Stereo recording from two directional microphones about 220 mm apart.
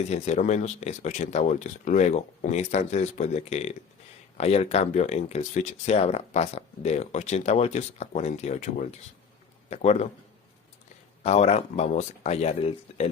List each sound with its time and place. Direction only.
0.1 s speech: 30° left (ahead or behind)
11.2 s speech: 30° left (ahead or behind)